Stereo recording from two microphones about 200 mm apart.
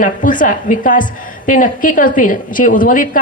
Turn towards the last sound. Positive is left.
turn(degrees=40)  # may be behind; listen again after turning